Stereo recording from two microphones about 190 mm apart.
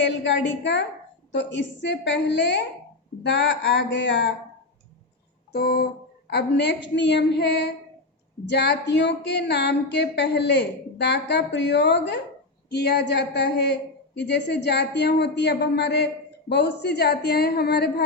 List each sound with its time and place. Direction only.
0.0 s speech: 70° left (ahead or behind)
5.5 s music: 55° left (ahead or behind)
6.3 s a woman's voice: 65° left (ahead or behind)